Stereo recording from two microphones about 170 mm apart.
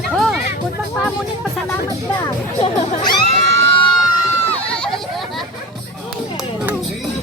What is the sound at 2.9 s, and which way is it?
Screaming, 40° left (ahead or behind).